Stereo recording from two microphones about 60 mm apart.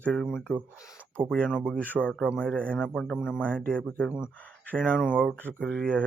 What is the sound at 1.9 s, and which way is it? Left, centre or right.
Speech, left.